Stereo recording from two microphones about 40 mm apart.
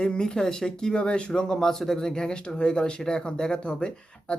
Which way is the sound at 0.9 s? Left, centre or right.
Left.